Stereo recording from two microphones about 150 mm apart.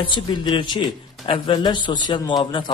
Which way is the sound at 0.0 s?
30° left (ahead or behind).